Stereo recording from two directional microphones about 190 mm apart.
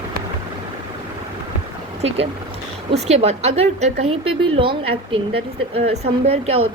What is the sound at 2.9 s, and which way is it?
A woman's voice, 35° right (ahead or behind).